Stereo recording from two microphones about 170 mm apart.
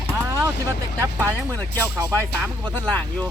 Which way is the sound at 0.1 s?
15° right (ahead or behind).